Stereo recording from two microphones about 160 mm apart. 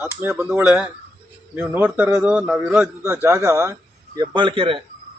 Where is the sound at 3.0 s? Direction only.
15° right (ahead or behind).